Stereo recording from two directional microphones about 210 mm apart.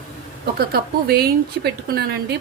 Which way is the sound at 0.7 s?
45° right (ahead or behind).